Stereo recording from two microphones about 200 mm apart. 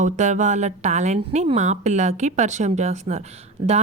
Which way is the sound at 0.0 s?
35° right (ahead or behind).